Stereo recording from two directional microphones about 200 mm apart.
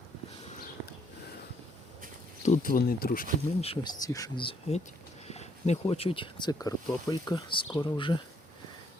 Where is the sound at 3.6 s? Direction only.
30° left (ahead or behind).